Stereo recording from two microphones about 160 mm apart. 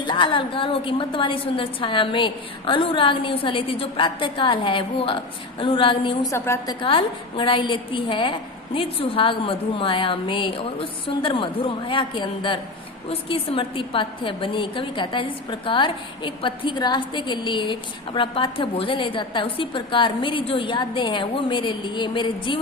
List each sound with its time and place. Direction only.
0.0 s a woman's voice: 30° left (ahead or behind)
6.3 s a woman's voice: 15° left (ahead or behind)
6.8 s a woman's voice: 30° left (ahead or behind)